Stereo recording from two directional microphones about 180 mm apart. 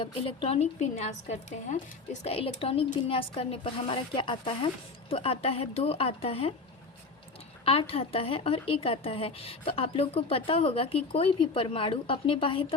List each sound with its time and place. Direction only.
0.0 s a woman's voice: 30° left (ahead or behind)
7.6 s a woman's voice: 30° left (ahead or behind)